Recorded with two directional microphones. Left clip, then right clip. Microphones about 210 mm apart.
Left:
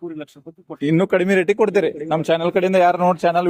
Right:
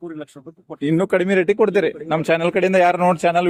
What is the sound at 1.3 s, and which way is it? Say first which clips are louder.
Speech: even; 20° left (ahead or behind).